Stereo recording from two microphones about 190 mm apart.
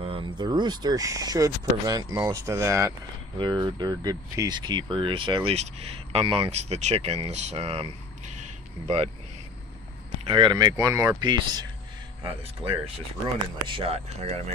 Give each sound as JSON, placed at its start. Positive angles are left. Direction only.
{"t": 0.0, "sound": "speech", "side_deg": -25}
{"t": 10.2, "sound": "speech", "side_deg": -25}